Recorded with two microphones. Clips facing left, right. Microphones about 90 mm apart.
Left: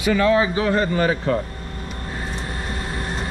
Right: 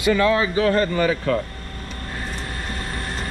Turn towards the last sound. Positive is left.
turn(degrees=5)  # may be behind; listen again after turning